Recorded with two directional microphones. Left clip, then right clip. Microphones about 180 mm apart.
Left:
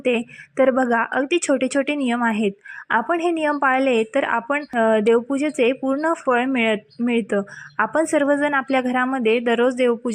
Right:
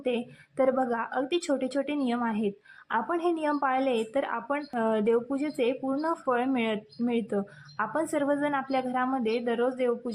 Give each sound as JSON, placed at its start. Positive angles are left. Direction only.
{"t": 0.0, "sound": "a woman's voice", "side_deg": 30}